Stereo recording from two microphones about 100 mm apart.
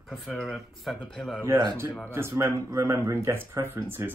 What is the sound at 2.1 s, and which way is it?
Speech, 25° right (ahead or behind).